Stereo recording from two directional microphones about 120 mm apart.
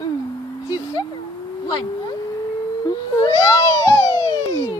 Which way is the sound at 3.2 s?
30° left (ahead or behind).